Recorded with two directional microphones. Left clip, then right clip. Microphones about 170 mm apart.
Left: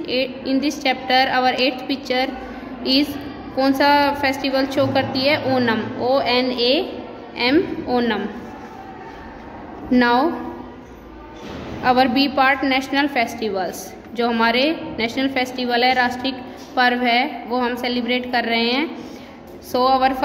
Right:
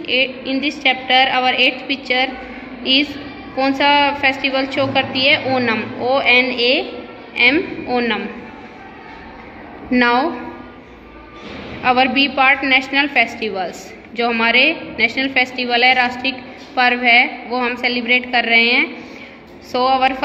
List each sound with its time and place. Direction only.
0.0 s a woman's voice: 15° left (ahead or behind)
9.8 s a woman's voice: 10° left (ahead or behind)
11.8 s a woman's voice: 15° left (ahead or behind)